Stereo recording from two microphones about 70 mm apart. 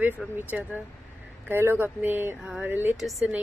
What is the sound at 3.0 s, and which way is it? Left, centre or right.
Speech, centre.